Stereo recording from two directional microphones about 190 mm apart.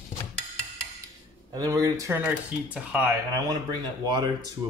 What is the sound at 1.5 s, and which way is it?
Speech, 20° right (ahead or behind).